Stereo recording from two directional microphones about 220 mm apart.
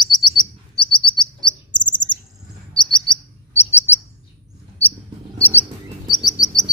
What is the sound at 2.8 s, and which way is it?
Chirp, 5° left (ahead or behind).